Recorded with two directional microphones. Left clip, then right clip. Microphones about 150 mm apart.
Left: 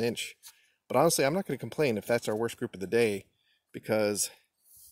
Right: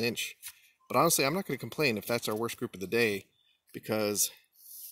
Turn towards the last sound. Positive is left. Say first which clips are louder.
# left 2 dB
turn(degrees=15)  # may be behind; listen again after turning